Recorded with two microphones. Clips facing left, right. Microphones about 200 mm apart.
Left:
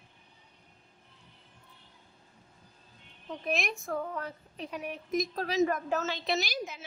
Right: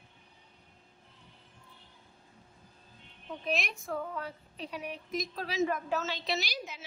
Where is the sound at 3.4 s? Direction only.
45° left (ahead or behind).